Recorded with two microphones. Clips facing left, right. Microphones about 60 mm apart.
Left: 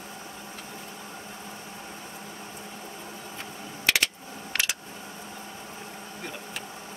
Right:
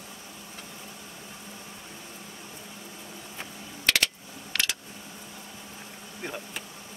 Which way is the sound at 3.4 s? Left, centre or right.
Left.